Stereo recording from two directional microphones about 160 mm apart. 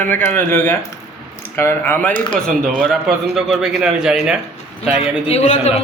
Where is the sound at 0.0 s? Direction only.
15° left (ahead or behind).